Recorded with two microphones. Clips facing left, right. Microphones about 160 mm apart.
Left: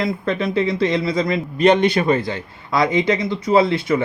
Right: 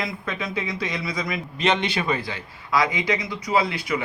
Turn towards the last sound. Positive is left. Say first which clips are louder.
# left 8 dB
turn(degrees=25)  # may be behind; listen again after turning